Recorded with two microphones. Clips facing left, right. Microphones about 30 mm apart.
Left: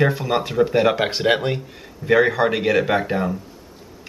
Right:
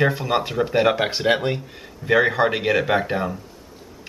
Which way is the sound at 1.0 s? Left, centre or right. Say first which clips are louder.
Left 1 dB; centre.